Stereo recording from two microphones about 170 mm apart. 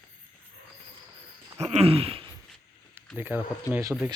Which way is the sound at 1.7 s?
35° right (ahead or behind).